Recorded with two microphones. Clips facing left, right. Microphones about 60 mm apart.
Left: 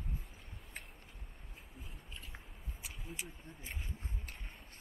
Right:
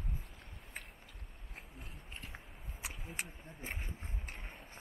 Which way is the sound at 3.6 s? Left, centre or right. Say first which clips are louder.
Right 5 dB; right.